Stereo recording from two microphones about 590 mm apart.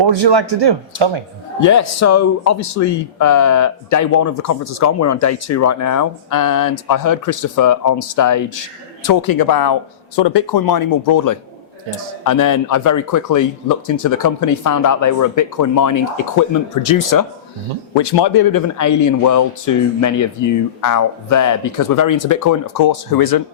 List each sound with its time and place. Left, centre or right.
0.0 s speech: right
1.6 s a man's voice: left